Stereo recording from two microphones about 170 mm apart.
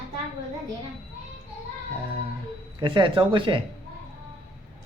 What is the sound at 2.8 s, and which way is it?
Speech, 30° right (ahead or behind).